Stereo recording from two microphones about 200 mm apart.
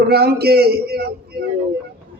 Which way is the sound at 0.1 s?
50° right (ahead or behind).